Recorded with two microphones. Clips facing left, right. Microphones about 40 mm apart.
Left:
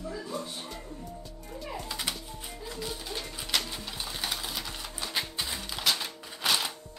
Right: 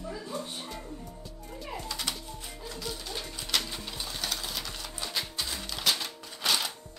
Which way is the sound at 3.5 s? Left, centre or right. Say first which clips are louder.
Even; centre.